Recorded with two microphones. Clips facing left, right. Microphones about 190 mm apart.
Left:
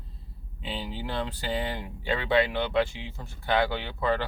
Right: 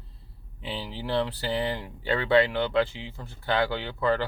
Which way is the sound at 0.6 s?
15° left (ahead or behind).